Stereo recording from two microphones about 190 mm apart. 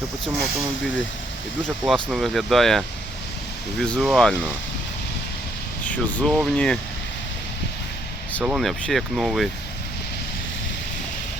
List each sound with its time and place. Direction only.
1.8 s speech: centre (ahead or behind)
5.8 s speech: 5° left (ahead or behind)
8.4 s speech: 5° right (ahead or behind)